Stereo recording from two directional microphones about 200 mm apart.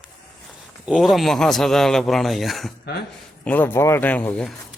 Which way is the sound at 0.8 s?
Centre (ahead or behind).